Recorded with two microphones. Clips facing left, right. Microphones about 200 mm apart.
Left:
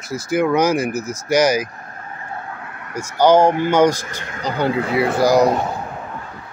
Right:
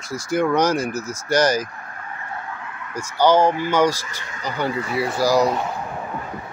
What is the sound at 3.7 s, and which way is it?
Speech, 20° left (ahead or behind).